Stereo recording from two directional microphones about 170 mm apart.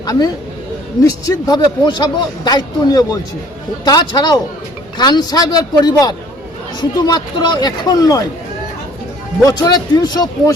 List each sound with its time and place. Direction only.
0.0 s speech: 20° left (ahead or behind)
1.3 s speech: 25° left (ahead or behind)
9.4 s speech: 20° left (ahead or behind)